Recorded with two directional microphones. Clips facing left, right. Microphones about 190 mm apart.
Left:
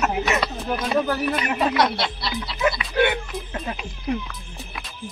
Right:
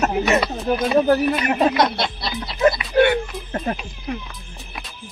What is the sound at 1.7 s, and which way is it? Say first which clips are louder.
Speech: right 2 dB; 20° right (ahead or behind).